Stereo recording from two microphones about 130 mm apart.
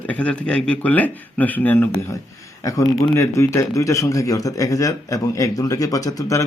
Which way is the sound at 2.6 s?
25° left (ahead or behind).